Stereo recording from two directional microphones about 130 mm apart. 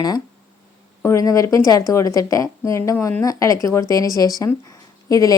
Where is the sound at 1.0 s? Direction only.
25° left (ahead or behind).